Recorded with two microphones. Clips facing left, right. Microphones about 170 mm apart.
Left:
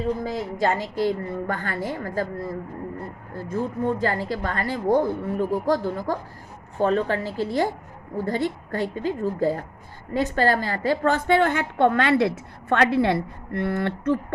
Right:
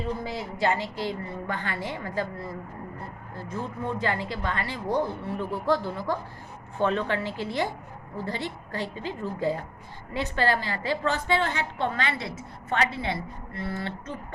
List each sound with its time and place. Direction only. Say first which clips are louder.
0.2 s a woman's voice: left 4 dB; 45° left (ahead or behind); by 14.2 s 60° left (ahead or behind)